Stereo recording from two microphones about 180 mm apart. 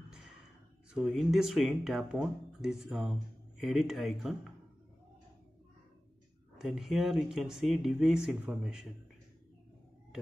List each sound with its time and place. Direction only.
0.9 s speech: centre (ahead or behind)
6.6 s speech: centre (ahead or behind)